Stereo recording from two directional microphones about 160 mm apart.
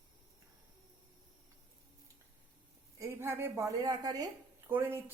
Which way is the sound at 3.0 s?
15° right (ahead or behind).